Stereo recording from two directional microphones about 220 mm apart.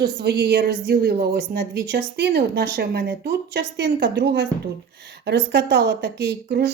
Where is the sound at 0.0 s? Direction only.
50° right (ahead or behind).